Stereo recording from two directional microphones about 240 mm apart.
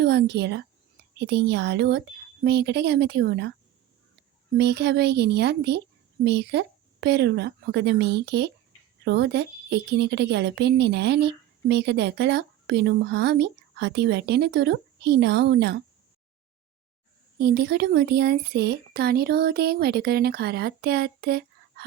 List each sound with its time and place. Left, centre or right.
0.0 s a woman's voice: right
4.5 s a woman's voice: right
17.3 s speech: right